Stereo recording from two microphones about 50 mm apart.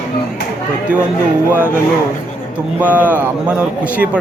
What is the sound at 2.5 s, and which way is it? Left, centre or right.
A man's voice, right.